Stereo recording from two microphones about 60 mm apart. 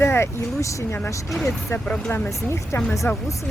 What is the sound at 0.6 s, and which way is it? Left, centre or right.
Speech, left.